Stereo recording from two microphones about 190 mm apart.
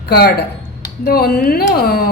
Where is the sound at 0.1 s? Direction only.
55° left (ahead or behind).